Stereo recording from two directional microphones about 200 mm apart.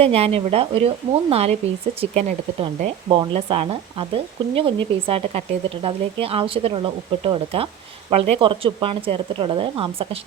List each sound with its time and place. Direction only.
0.0 s speech: 30° right (ahead or behind)